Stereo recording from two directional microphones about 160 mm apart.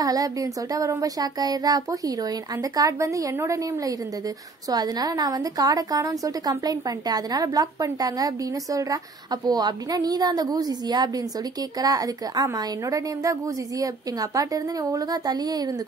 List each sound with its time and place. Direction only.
0.0 s a woman's voice: 25° right (ahead or behind)